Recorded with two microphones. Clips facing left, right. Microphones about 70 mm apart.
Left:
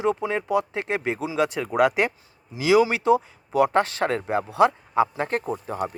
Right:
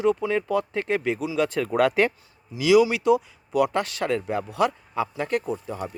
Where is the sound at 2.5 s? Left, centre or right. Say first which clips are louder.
Right 1 dB; left.